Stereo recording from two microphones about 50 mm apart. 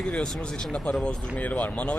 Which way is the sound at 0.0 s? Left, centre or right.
Centre.